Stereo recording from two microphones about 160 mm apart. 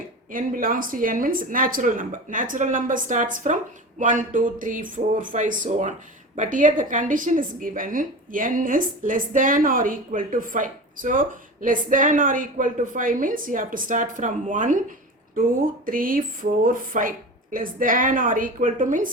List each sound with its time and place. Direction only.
0.3 s a woman's voice: 60° right (ahead or behind)
15.9 s a woman's voice: 60° right (ahead or behind)